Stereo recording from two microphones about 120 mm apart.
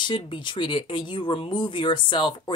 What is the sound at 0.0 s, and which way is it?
A woman's voice, 40° left (ahead or behind).